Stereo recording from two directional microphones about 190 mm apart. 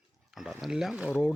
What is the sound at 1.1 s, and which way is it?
Speech, 10° left (ahead or behind).